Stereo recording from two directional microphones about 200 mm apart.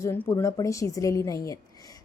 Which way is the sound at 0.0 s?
15° left (ahead or behind).